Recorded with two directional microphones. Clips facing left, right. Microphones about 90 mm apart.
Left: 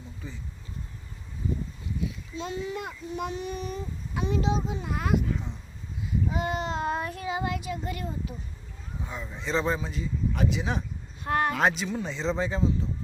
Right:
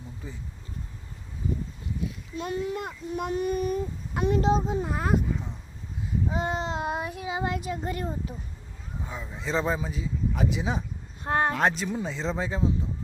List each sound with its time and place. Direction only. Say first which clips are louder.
2.3 s a child's voice: right 4 dB; 55° right (ahead or behind); by 5.2 s 40° right (ahead or behind)
5.3 s a sound: even; 5° right (ahead or behind)
6.2 s babbling: right 1 dB; 30° right (ahead or behind)
6.7 s child singing: left 1 dB; 15° right (ahead or behind)
7.4 s speech: right 2 dB; 40° right (ahead or behind)
9.0 s speech: even; 5° right (ahead or behind)
11.2 s speech: right 1 dB; 25° right (ahead or behind)
11.5 s speech: even; centre (ahead or behind)